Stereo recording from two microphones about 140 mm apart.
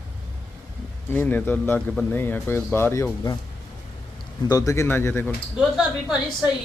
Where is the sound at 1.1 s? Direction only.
15° left (ahead or behind).